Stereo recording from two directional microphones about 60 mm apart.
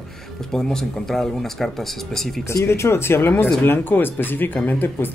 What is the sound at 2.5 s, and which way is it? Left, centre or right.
Speech, left.